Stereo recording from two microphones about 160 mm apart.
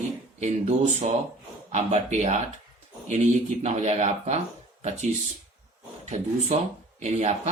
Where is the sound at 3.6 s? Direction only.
45° right (ahead or behind).